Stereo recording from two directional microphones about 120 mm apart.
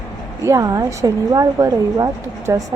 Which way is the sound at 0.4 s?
25° right (ahead or behind).